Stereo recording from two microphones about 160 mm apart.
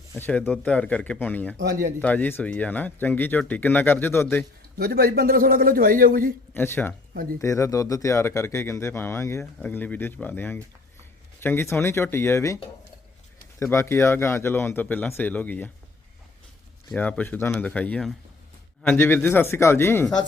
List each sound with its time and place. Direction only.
0.1 s speech: 10° left (ahead or behind)
1.5 s speech: 80° right
2.0 s speech: 10° left (ahead or behind)
4.8 s a man's voice: 75° right (ahead or behind)
6.5 s speech: 15° left (ahead or behind)
13.6 s speech: 15° left (ahead or behind)
16.9 s speech: 10° left (ahead or behind)